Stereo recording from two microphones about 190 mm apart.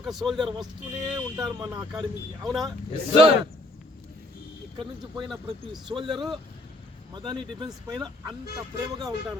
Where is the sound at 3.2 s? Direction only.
30° right (ahead or behind).